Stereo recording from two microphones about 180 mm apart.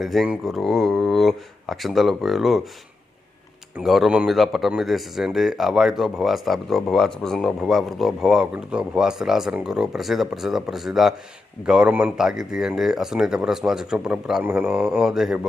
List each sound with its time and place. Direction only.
0.0 s speech: centre (ahead or behind)
3.8 s speech: centre (ahead or behind)